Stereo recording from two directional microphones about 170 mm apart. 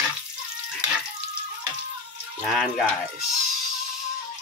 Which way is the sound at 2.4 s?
Centre (ahead or behind).